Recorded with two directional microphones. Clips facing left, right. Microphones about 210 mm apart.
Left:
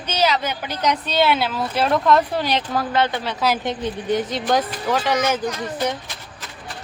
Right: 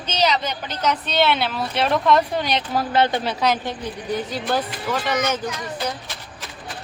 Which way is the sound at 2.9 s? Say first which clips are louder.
Right 2 dB; 30° right (ahead or behind).